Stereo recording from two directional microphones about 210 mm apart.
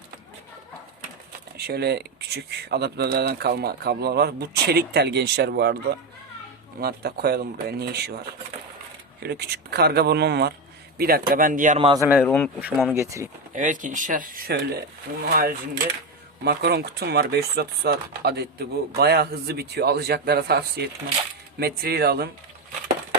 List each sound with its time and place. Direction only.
1.5 s speech: 50° right (ahead or behind)
9.2 s speech: 50° right (ahead or behind)
11.8 s a man's voice: 25° right (ahead or behind)
12.2 s speech: 5° left (ahead or behind)
12.5 s speech: 5° right (ahead or behind)
13.5 s speech: 40° right (ahead or behind)